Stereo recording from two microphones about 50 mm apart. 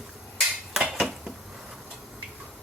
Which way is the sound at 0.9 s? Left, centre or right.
Centre.